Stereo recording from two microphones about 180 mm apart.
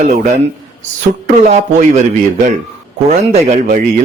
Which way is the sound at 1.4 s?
40° right (ahead or behind).